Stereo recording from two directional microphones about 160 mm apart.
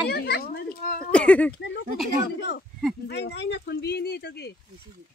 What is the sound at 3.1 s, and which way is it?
Speech, 90° left.